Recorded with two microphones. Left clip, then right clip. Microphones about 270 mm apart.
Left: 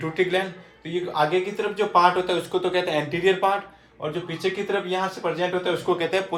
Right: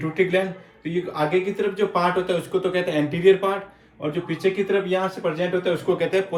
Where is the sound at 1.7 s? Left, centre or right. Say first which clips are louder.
Left 5 dB; centre.